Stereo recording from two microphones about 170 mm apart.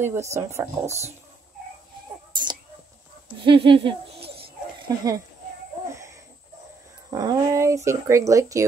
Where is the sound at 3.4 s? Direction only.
30° right (ahead or behind).